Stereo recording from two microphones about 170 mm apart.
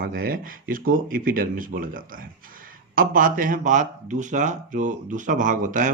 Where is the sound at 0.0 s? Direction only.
60° right (ahead or behind).